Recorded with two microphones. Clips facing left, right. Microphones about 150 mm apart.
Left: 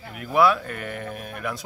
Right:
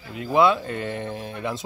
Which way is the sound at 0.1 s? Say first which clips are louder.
Right 1 dB; 25° right (ahead or behind).